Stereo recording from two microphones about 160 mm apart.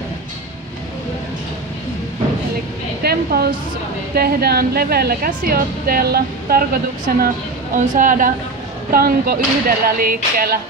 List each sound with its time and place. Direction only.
3.0 s a woman's voice: 75° right (ahead or behind)
7.2 s speech: 60° right (ahead or behind)
8.9 s a woman's voice: 70° right (ahead or behind)